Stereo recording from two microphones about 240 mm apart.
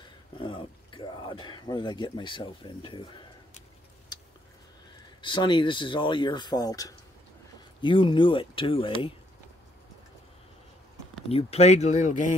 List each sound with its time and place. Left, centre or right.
0.4 s speech: centre
5.2 s speech: centre
11.2 s speech: left